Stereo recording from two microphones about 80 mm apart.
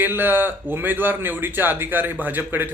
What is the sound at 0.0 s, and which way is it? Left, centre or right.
Speech, right.